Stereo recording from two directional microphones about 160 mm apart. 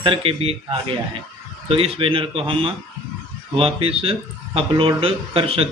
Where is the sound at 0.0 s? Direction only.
35° right (ahead or behind).